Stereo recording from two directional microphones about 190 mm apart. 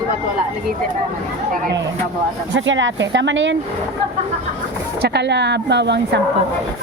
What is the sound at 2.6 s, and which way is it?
Speech, 75° right (ahead or behind).